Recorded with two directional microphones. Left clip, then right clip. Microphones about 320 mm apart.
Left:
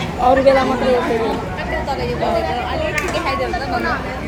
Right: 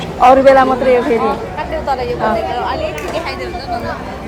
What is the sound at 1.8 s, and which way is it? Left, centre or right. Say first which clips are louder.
Speech: right 6 dB; centre.